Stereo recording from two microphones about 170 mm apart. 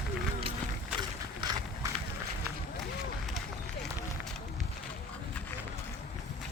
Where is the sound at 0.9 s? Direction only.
25° right (ahead or behind).